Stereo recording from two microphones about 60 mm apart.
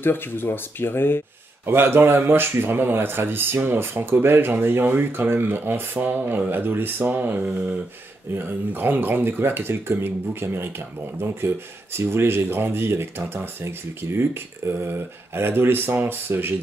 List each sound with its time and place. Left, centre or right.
0.0 s speech: left
1.7 s speech: right